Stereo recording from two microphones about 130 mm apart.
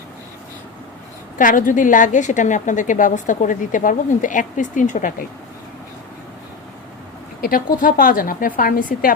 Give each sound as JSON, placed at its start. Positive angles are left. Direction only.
{"t": 1.4, "sound": "a woman's voice", "side_deg": 90}
{"t": 7.4, "sound": "a woman's voice", "side_deg": 90}